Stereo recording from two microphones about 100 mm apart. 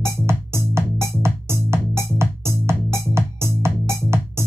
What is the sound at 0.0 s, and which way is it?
Music, 25° right (ahead or behind).